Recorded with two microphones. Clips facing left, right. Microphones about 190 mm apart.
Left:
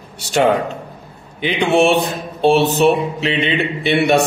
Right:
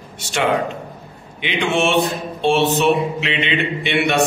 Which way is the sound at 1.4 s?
35° left (ahead or behind).